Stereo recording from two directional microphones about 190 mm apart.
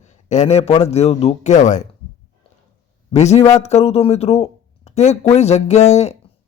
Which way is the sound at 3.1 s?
35° left (ahead or behind).